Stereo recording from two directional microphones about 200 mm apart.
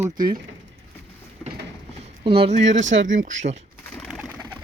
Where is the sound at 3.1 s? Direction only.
40° right (ahead or behind).